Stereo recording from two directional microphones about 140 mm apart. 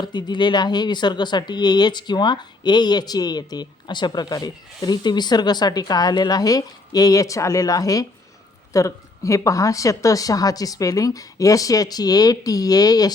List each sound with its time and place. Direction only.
0.0 s speech: 30° left (ahead or behind)